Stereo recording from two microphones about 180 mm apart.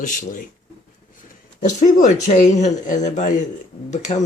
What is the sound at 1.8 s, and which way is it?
Speech, 45° left (ahead or behind).